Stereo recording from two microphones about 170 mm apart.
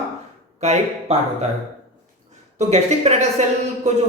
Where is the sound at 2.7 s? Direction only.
40° right (ahead or behind).